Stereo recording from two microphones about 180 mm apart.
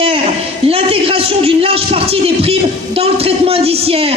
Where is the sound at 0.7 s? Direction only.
30° right (ahead or behind).